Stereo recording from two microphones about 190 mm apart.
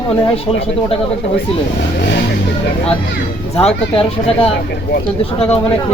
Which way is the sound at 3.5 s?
30° left (ahead or behind).